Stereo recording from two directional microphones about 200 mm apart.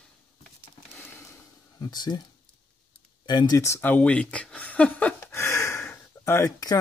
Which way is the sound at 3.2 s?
20° left (ahead or behind).